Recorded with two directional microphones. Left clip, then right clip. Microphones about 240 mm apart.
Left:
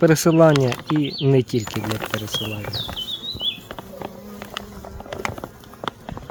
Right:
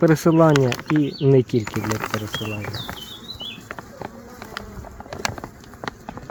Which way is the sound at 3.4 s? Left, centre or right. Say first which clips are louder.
Left 5 dB; centre.